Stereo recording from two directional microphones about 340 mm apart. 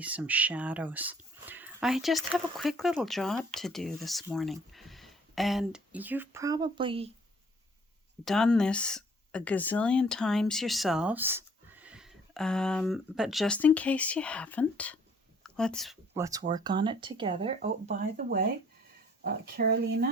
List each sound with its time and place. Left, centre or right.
0.0 s speech: centre
8.2 s speech: centre; by 20.1 s right